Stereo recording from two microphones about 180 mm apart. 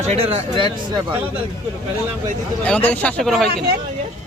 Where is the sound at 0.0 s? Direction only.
35° right (ahead or behind).